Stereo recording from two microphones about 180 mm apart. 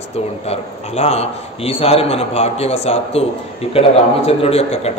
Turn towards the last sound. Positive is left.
turn(degrees=35)  # may be behind; listen again after turning